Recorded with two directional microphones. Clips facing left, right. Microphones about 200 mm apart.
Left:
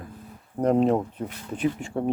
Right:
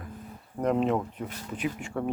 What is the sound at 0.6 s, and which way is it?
Speech, 35° left (ahead or behind).